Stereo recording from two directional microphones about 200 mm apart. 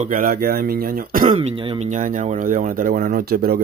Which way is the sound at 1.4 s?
30° right (ahead or behind).